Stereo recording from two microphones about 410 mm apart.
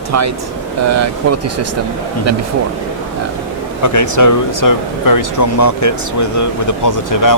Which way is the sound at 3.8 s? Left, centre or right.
Left.